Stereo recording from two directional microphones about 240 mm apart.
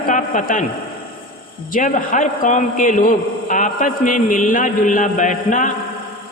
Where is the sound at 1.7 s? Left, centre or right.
Left.